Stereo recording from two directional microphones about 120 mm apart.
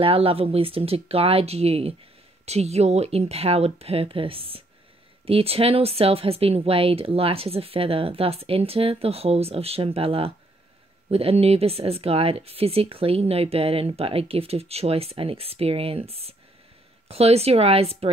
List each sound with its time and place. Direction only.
0.0 s speech: 50° right (ahead or behind)